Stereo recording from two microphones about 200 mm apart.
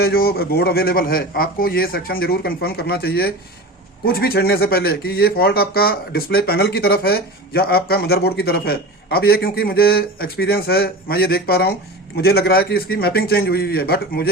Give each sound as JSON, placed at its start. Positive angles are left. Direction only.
{"t": 0.0, "sound": "speech", "side_deg": 50}